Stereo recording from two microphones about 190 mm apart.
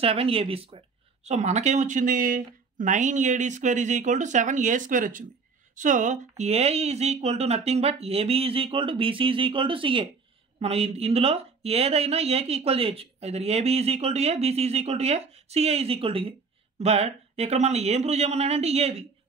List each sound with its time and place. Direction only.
0.0 s speech: 30° right (ahead or behind)